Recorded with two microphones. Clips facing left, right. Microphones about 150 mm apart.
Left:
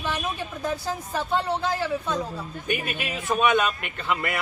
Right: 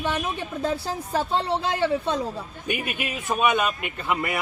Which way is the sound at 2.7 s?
5° right (ahead or behind).